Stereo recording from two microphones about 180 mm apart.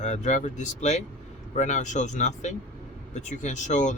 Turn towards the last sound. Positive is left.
turn(degrees=40)  # may be behind; listen again after turning